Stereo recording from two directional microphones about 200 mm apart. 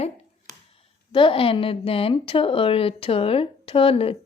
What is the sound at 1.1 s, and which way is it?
Speech, 25° left (ahead or behind).